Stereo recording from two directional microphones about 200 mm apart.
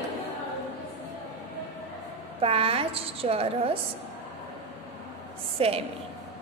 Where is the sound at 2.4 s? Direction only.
30° right (ahead or behind).